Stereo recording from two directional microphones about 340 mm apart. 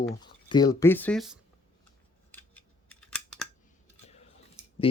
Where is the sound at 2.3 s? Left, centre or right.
Centre.